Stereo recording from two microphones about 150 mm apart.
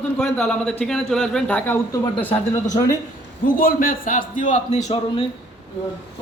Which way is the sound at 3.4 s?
70° left (ahead or behind).